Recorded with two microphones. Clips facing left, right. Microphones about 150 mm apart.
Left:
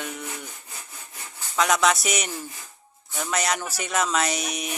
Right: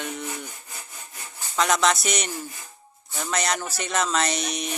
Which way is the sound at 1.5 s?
5° left (ahead or behind).